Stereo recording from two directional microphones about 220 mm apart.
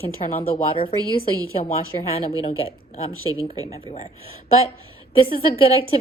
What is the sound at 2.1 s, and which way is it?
A woman's voice, 25° left (ahead or behind).